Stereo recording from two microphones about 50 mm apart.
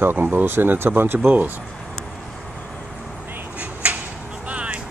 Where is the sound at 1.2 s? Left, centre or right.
Right.